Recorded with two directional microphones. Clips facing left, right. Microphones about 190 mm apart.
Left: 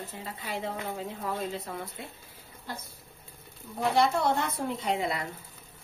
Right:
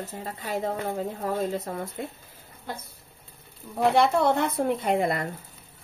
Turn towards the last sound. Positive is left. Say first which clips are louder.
# right 5 dB
turn(degrees=-50)  # may be behind; listen again after turning